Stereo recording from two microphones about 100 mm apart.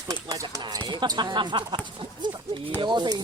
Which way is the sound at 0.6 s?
45° right (ahead or behind).